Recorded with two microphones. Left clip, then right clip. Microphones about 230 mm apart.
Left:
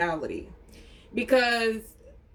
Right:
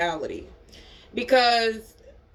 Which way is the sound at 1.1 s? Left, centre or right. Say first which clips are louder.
Right 2 dB; centre.